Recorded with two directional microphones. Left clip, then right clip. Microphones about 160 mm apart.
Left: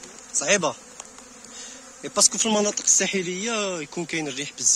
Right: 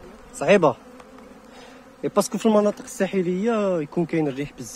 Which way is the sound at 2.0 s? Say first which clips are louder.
Even; 75° right (ahead or behind).